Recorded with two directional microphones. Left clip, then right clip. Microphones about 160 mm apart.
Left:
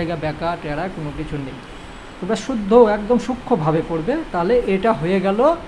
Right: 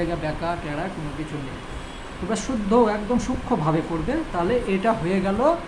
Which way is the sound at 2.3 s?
45° left (ahead or behind).